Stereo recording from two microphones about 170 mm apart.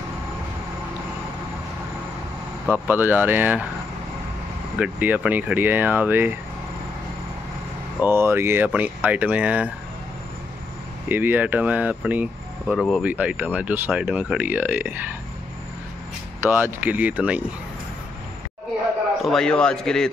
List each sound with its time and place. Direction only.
2.7 s speech: 10° right (ahead or behind)
4.7 s speech: 5° right (ahead or behind)
8.0 s speech: 15° right (ahead or behind)
11.1 s speech: 10° right (ahead or behind)
16.4 s speech: 10° right (ahead or behind)
19.2 s a man's voice: 5° left (ahead or behind)